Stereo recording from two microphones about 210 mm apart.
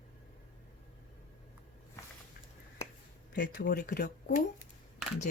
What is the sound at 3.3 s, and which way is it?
Speech, 40° left (ahead or behind).